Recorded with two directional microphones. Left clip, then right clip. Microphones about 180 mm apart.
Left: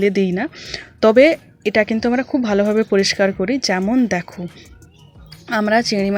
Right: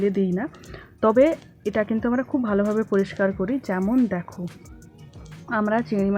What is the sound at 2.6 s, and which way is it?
Speech, 35° left (ahead or behind).